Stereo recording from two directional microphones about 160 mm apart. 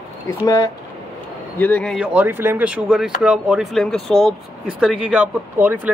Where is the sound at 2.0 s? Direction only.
10° right (ahead or behind).